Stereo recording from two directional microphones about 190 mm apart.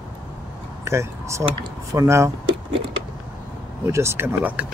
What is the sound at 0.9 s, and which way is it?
Speech, 15° right (ahead or behind).